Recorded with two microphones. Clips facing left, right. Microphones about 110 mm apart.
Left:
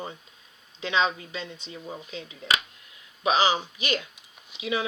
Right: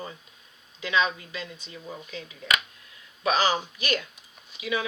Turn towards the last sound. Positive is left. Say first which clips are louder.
# left 1 dB
turn(degrees=25)  # may be behind; listen again after turning